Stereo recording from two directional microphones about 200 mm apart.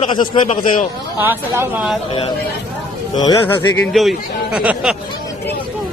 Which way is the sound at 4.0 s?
Centre (ahead or behind).